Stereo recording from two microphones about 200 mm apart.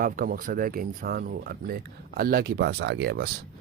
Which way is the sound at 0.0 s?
45° right (ahead or behind).